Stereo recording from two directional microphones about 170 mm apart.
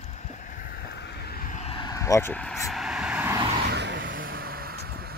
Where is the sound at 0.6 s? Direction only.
65° left (ahead or behind).